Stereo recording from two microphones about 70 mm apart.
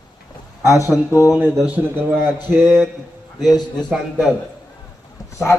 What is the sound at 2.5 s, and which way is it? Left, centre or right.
Speech, centre.